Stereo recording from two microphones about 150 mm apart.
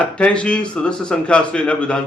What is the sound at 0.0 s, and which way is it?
A man's voice, 10° left (ahead or behind).